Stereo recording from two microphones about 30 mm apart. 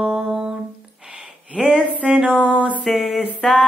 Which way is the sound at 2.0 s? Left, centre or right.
Right.